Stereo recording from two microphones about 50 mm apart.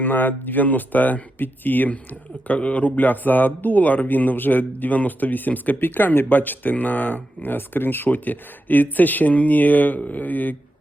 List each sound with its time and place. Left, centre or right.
0.0 s speech: left
2.5 s speech: left